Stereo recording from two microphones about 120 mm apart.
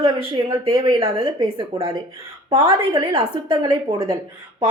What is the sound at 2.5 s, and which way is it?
A woman's voice, 50° right (ahead or behind).